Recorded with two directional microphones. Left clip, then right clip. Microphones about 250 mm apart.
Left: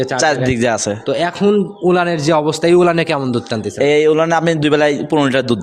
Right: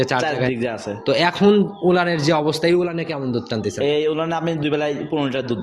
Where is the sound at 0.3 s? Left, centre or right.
Left.